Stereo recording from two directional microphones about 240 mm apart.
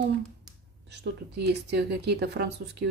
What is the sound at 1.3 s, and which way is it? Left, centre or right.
A woman's voice, right.